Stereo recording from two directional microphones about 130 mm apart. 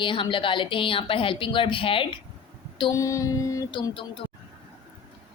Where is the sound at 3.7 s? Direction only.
40° left (ahead or behind).